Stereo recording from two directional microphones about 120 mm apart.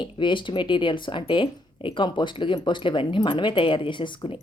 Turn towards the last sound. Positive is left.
turn(degrees=45)  # may be behind; listen again after turning